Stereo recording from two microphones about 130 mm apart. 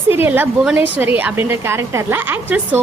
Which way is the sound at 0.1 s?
15° right (ahead or behind).